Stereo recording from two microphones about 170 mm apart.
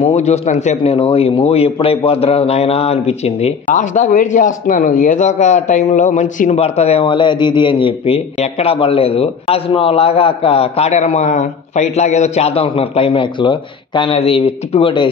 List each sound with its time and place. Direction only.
0.0 s a man's voice: 40° left (ahead or behind)